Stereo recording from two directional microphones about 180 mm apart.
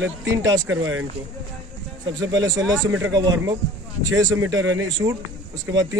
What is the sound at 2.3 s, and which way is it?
Speech, 20° right (ahead or behind).